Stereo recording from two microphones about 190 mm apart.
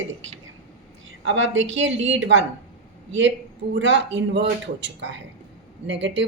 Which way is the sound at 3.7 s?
70° right (ahead or behind).